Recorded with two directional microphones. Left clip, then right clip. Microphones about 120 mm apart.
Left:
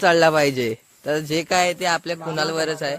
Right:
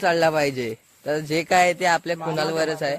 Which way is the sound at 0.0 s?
40° left (ahead or behind).